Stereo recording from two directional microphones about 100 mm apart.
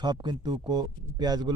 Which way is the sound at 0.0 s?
45° right (ahead or behind).